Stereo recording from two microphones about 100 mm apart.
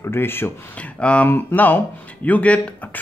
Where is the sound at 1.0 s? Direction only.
10° left (ahead or behind).